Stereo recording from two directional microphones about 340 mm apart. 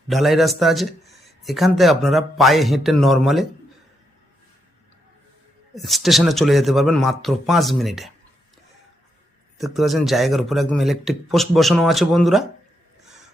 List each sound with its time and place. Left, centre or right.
0.1 s a man's voice: centre
5.7 s a man's voice: centre
9.6 s a man's voice: centre